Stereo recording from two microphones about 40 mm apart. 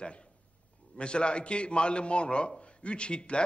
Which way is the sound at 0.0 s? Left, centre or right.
Left.